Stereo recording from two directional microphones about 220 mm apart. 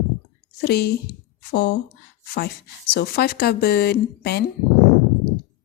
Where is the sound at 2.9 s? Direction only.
45° left (ahead or behind).